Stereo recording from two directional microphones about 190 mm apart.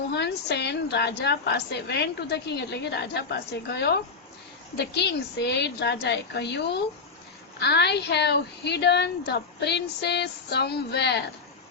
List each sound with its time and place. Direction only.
0.1 s a woman's voice: 60° left (ahead or behind)